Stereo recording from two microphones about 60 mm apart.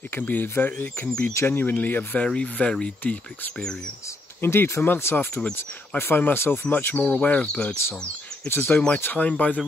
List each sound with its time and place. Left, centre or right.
0.2 s speech: left
1.3 s speech: left
2.2 s speech: centre
4.4 s speech: left
7.0 s speech: left
8.5 s speech: left
9.0 s speech: left